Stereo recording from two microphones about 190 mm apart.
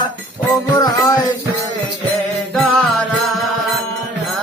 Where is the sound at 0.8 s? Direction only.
20° left (ahead or behind).